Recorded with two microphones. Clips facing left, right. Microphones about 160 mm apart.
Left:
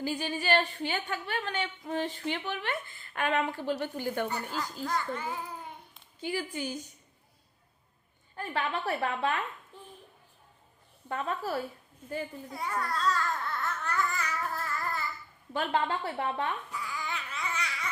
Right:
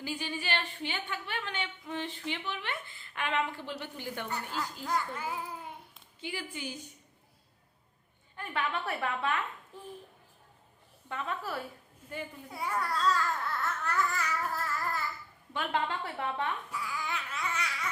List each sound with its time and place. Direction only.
0.0 s a woman's voice: 45° left (ahead or behind)
4.3 s a child's voice: 5° right (ahead or behind)
6.1 s a woman's voice: 40° left (ahead or behind)
8.4 s a woman's voice: 35° left (ahead or behind)
9.7 s a child's voice: centre (ahead or behind)
11.1 s a woman's voice: 40° left (ahead or behind)
12.5 s a child's voice: 10° right (ahead or behind)
13.8 s babbling: centre (ahead or behind)
15.5 s a woman's voice: 35° left (ahead or behind)
16.7 s babbling: centre (ahead or behind)